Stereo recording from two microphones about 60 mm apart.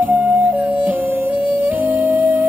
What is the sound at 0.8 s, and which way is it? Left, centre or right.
Music, right.